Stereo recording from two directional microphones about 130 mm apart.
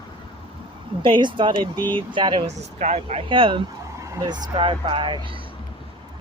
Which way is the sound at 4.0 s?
25° right (ahead or behind).